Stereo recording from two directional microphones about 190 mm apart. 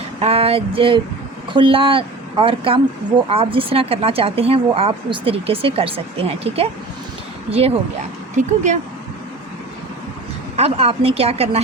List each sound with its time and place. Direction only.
0.2 s speech: 30° right (ahead or behind)
8.4 s speech: 40° right (ahead or behind)
10.6 s speech: 30° right (ahead or behind)